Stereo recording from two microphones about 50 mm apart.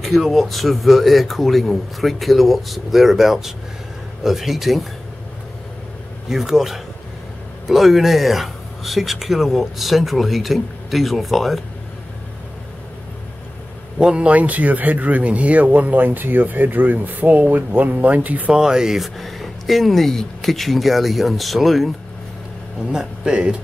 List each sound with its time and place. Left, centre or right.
0.0 s speech: centre
6.2 s speech: centre
13.9 s speech: centre
18.5 s speech: centre
18.9 s speech: centre
22.8 s speech: centre